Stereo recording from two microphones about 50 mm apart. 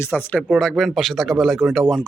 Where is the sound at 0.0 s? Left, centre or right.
Left.